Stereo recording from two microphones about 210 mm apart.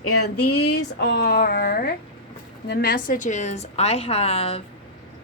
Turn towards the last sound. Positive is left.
turn(degrees=25)  # may be behind; listen again after turning